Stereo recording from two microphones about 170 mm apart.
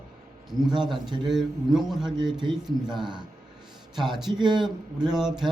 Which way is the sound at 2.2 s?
25° right (ahead or behind).